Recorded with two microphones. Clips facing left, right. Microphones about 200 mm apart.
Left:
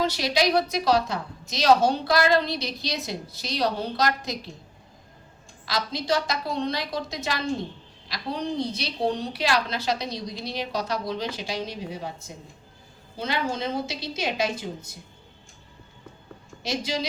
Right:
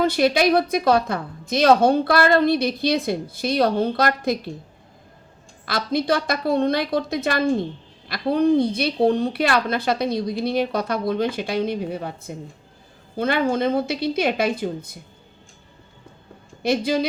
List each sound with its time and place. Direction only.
0.0 s a woman's voice: 55° right (ahead or behind)
5.6 s a woman's voice: 55° right (ahead or behind)
16.6 s a woman's voice: 55° right (ahead or behind)